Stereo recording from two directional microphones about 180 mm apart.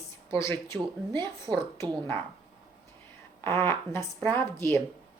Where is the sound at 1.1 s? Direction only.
25° right (ahead or behind).